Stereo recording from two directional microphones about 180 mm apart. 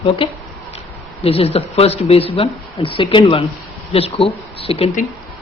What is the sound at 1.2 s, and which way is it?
Speech, 35° left (ahead or behind).